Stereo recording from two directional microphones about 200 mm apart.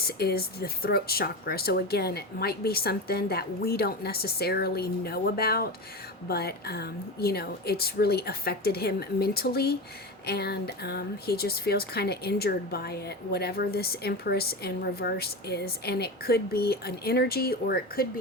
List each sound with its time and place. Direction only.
0.0 s speech: 50° left (ahead or behind)